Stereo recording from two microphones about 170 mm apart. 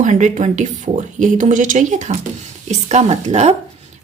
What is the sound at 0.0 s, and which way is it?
Speech, 45° right (ahead or behind).